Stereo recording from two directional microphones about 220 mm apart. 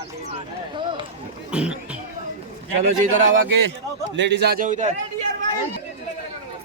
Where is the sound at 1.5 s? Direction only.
5° right (ahead or behind).